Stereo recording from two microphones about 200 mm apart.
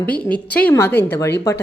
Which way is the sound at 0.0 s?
10° left (ahead or behind).